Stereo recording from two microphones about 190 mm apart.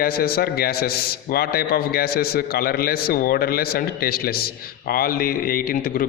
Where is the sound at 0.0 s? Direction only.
55° left (ahead or behind).